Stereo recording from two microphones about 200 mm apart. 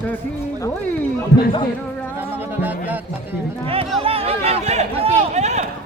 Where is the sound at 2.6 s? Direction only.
10° right (ahead or behind).